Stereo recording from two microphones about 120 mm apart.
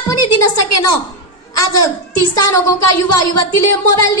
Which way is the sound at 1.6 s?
30° left (ahead or behind).